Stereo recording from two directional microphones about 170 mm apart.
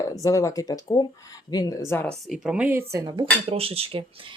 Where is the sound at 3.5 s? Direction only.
35° right (ahead or behind).